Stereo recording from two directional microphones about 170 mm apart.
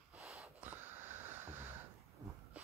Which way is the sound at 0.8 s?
10° right (ahead or behind).